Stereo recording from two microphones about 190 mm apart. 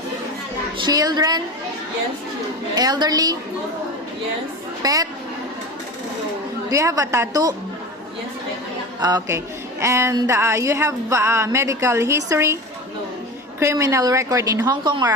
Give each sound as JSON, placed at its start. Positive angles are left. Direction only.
{"t": 0.8, "sound": "a woman's voice", "side_deg": -20}
{"t": 2.7, "sound": "a woman's voice", "side_deg": -20}
{"t": 4.8, "sound": "a woman's voice", "side_deg": -20}
{"t": 6.7, "sound": "speech", "side_deg": -15}
{"t": 9.0, "sound": "a woman's voice", "side_deg": -20}
{"t": 13.6, "sound": "speech", "side_deg": -15}